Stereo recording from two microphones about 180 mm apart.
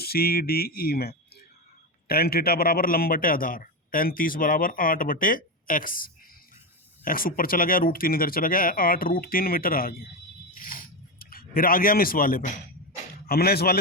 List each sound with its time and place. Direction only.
0.0 s a man's voice: 60° left (ahead or behind)
10.6 s a sound: 55° left (ahead or behind)
13.2 s speech: 60° left (ahead or behind)